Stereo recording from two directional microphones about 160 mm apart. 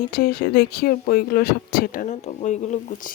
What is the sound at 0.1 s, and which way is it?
Speech, 70° left (ahead or behind).